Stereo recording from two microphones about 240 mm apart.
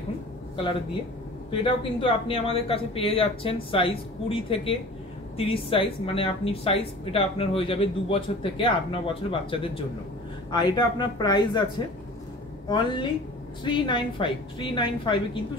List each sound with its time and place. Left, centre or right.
1.6 s speech: left
12.6 s speech: centre